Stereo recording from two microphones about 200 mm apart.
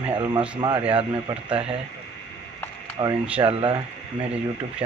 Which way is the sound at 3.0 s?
25° right (ahead or behind).